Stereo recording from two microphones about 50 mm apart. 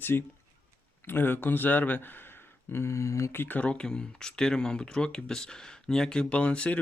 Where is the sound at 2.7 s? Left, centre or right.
Left.